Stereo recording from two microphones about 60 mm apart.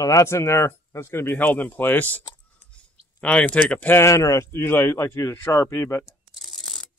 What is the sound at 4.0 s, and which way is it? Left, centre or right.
Speech, left.